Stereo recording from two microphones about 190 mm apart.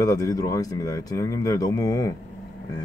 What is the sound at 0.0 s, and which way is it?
Speech, 15° left (ahead or behind).